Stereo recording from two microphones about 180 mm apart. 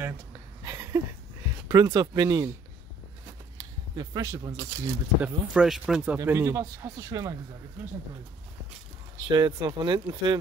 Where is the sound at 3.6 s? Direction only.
20° right (ahead or behind).